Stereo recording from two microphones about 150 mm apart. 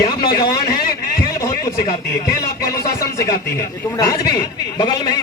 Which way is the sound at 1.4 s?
20° left (ahead or behind).